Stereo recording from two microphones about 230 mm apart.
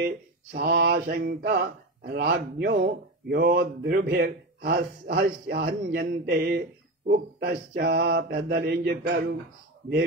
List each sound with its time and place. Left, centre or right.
0.0 s mantra: right